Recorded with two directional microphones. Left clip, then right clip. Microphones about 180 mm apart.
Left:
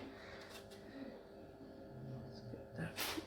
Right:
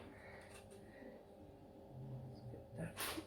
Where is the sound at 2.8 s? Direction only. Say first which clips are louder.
Left 2 dB; 15° left (ahead or behind).